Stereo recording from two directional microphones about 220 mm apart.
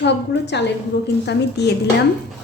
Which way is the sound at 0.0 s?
50° left (ahead or behind).